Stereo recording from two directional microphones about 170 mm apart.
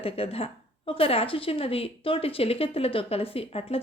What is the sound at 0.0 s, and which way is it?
A woman's voice, 35° left (ahead or behind).